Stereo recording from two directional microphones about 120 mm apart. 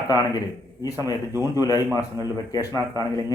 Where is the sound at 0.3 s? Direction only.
30° left (ahead or behind).